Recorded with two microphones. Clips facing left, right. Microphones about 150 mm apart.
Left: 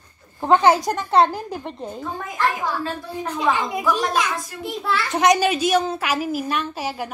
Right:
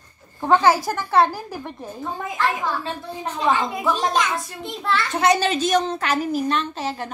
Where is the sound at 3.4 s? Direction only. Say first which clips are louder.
Right 1 dB; 15° left (ahead or behind).